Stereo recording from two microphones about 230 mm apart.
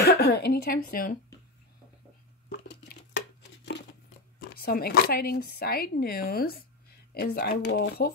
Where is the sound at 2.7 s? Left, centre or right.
Left.